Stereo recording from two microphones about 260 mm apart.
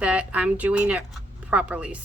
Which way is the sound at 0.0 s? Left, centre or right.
Centre.